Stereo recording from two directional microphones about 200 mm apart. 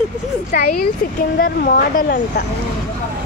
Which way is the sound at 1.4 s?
45° left (ahead or behind).